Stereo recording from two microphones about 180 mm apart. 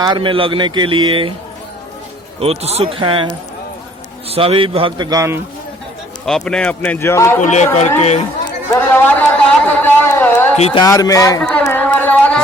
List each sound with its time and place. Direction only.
0.0 s speech: 25° right (ahead or behind)
2.4 s speech: 35° right (ahead or behind)
4.3 s speech: 30° right (ahead or behind)
6.2 s speech: centre (ahead or behind)
7.4 s speech: 40° left (ahead or behind)
8.7 s speech: 10° left (ahead or behind)
9.7 s a sound: 10° left (ahead or behind)
10.6 s a man's voice: 25° left (ahead or behind)
11.6 s carnatic music: 10° left (ahead or behind)